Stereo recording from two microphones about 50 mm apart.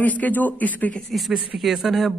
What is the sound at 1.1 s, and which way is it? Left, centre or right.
Speech, centre.